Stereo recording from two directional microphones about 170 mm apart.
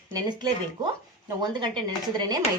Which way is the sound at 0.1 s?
25° right (ahead or behind).